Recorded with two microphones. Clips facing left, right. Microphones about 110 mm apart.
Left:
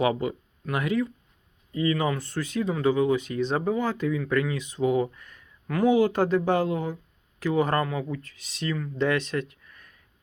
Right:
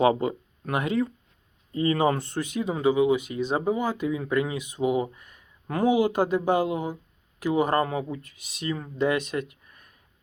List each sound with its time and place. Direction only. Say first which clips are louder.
0.0 s speech: right 3 dB; 30° right (ahead or behind)
2.1 s speech: even; 20° right (ahead or behind)